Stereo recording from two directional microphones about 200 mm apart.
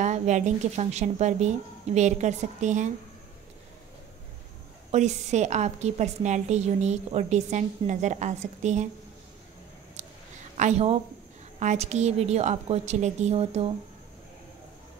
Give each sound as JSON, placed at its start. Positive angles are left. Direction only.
{"t": 0.0, "sound": "a woman's voice", "side_deg": -35}
{"t": 4.9, "sound": "a woman's voice", "side_deg": -35}
{"t": 10.0, "sound": "a sound", "side_deg": -35}
{"t": 10.6, "sound": "a woman's voice", "side_deg": -30}